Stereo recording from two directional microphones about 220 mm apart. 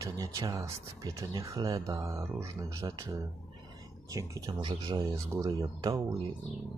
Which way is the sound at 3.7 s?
15° right (ahead or behind).